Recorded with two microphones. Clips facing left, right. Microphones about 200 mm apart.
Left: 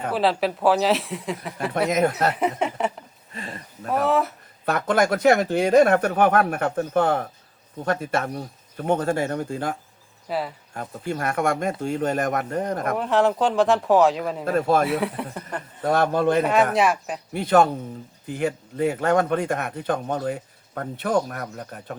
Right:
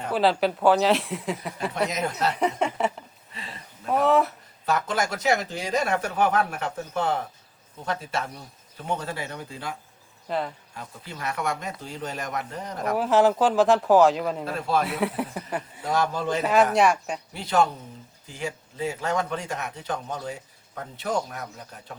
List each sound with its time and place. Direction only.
0.1 s speech: centre (ahead or behind)
1.9 s speech: 55° left (ahead or behind)
2.3 s speech: centre (ahead or behind)
3.3 s speech: 50° left (ahead or behind)
3.9 s speech: centre (ahead or behind)
4.6 s speech: 55° left (ahead or behind)
10.2 s speech: 5° left (ahead or behind)
10.8 s speech: 50° left (ahead or behind)
13.0 s speech: centre (ahead or behind)
14.4 s speech: 50° left (ahead or behind)
14.8 s speech: centre (ahead or behind)
15.8 s speech: 55° left (ahead or behind)
16.4 s speech: centre (ahead or behind)
17.3 s speech: 55° left (ahead or behind)